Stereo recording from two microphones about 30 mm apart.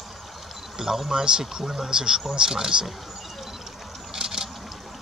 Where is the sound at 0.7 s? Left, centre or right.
Centre.